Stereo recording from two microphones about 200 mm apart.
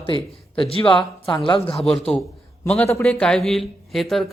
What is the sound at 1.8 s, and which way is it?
A man's voice, centre (ahead or behind).